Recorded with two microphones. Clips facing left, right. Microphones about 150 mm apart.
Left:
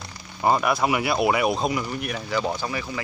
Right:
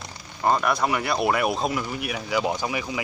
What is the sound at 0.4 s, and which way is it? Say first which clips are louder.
Speech: left 1 dB; 5° left (ahead or behind).